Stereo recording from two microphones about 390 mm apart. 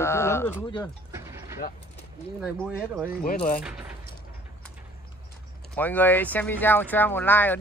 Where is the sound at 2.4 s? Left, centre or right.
Centre.